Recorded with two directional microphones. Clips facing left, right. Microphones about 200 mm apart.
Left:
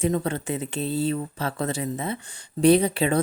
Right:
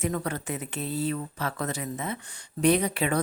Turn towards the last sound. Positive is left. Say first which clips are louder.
# left 5 dB
turn(degrees=30)  # may be behind; listen again after turning